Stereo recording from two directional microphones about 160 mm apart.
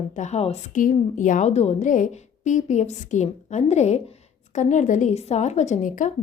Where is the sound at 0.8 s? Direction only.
55° left (ahead or behind).